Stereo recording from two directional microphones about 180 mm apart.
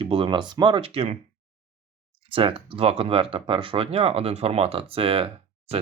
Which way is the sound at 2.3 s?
30° right (ahead or behind).